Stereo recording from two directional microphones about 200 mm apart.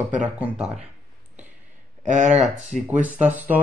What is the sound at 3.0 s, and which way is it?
Speech, 5° right (ahead or behind).